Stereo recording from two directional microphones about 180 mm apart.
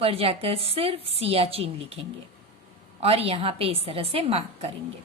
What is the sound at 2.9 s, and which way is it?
A woman's voice, 35° right (ahead or behind).